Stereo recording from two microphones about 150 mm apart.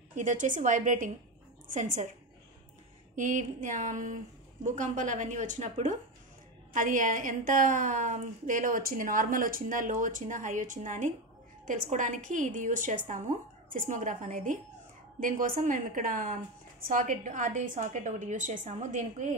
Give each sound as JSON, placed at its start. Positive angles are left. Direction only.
{"t": 0.1, "sound": "a woman's voice", "side_deg": -55}
{"t": 3.2, "sound": "a woman's voice", "side_deg": -55}